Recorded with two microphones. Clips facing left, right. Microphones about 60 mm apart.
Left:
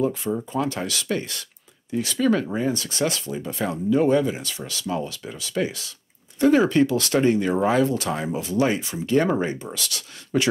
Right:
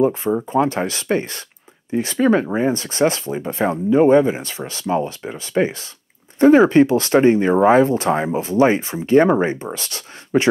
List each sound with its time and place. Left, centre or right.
0.0 s speech: right